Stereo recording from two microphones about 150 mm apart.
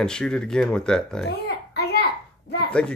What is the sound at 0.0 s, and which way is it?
Speech, 5° left (ahead or behind).